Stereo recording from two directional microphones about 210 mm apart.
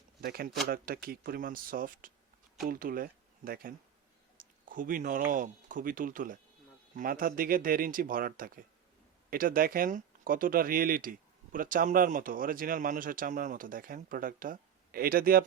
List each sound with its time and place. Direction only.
0.2 s speech: 45° right (ahead or behind)